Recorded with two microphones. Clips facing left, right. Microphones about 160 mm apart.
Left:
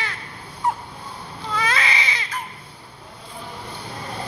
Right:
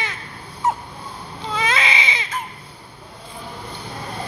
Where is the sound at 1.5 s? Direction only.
20° right (ahead or behind).